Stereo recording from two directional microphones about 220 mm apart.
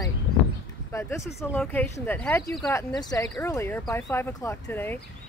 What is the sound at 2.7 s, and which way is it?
Speech, 15° left (ahead or behind).